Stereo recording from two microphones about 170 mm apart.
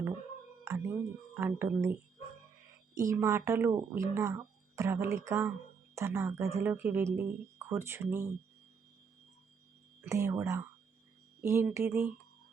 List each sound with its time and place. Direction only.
0.6 s speech: 15° right (ahead or behind)
10.0 s speech: 15° right (ahead or behind)